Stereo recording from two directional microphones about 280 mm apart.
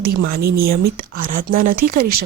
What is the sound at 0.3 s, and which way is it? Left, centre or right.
A woman's voice, right.